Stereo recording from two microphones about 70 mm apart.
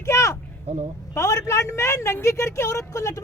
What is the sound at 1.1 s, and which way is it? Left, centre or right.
Speech, left.